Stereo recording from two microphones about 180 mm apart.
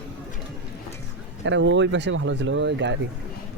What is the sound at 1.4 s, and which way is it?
Speech, 90° right.